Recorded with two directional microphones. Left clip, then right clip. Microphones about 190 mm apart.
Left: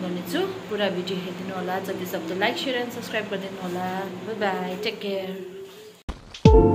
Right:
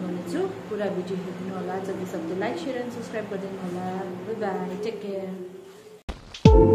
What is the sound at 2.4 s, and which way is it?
Speech, centre (ahead or behind).